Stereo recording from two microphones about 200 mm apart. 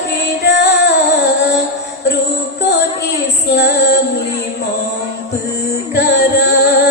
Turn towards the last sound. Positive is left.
turn(degrees=55)  # may be behind; listen again after turning